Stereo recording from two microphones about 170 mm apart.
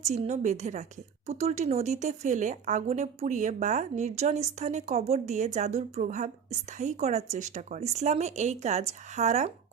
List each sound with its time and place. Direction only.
0.0 s speech: 40° right (ahead or behind)